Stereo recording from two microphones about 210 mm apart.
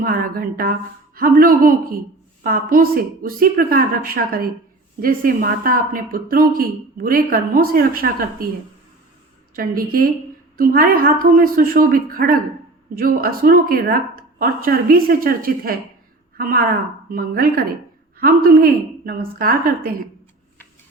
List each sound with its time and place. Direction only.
0.0 s speech: 45° right (ahead or behind)
9.6 s speech: 45° right (ahead or behind)